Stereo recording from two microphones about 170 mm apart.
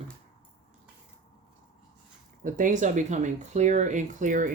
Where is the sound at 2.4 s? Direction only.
50° right (ahead or behind).